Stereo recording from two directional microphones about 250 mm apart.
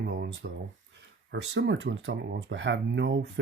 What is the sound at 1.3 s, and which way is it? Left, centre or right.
Speech, right.